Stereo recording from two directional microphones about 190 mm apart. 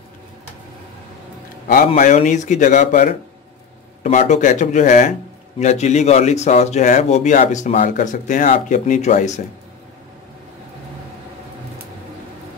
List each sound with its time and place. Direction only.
2.0 s speech: 40° left (ahead or behind)